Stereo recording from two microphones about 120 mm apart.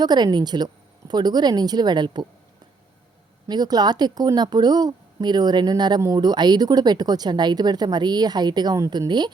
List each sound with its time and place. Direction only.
0.0 s speech: 35° right (ahead or behind)
3.4 s speech: 35° right (ahead or behind)